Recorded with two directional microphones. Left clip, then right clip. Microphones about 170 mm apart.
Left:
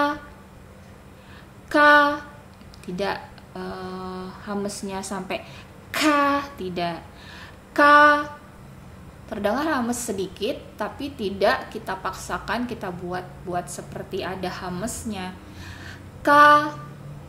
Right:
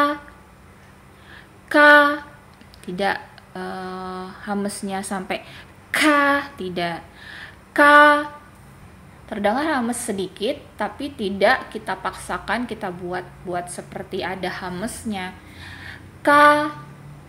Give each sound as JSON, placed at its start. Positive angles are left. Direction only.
{"t": 1.7, "sound": "a woman's voice", "side_deg": -20}
{"t": 9.3, "sound": "a woman's voice", "side_deg": -15}